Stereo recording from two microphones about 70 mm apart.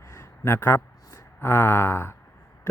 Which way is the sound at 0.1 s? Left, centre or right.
Left.